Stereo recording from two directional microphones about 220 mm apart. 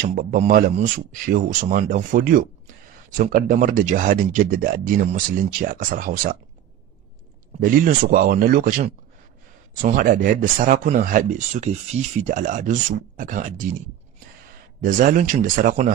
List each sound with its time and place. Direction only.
0.0 s speech: 40° right (ahead or behind)
7.6 s speech: 40° right (ahead or behind)
14.8 s speech: 35° right (ahead or behind)